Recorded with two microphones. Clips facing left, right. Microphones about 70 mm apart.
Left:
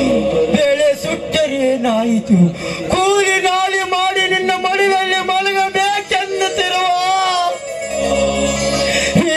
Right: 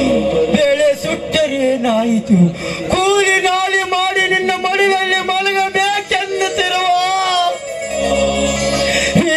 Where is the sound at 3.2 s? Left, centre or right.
Right.